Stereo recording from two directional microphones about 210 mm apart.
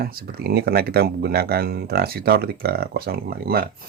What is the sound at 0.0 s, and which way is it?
Speech, 45° right (ahead or behind).